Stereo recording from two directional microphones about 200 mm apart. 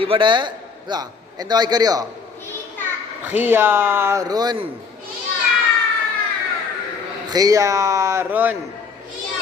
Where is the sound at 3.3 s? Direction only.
10° right (ahead or behind).